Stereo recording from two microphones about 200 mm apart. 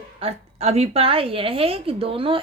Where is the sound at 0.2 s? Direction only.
30° right (ahead or behind).